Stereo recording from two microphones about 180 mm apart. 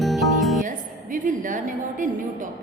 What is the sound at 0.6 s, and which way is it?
A woman's voice, 45° right (ahead or behind).